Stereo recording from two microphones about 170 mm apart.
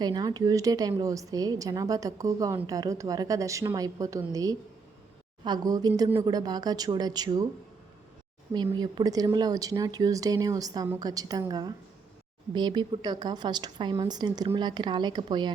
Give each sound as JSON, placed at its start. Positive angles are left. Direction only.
{"t": 0.0, "sound": "a woman's voice", "side_deg": -25}
{"t": 8.5, "sound": "a woman's voice", "side_deg": -25}